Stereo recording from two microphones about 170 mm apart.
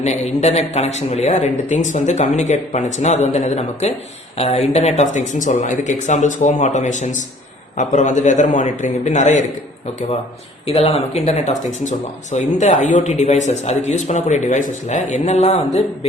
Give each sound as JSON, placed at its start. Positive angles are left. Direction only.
{"t": 0.0, "sound": "speech", "side_deg": 40}
{"t": 10.7, "sound": "speech", "side_deg": 35}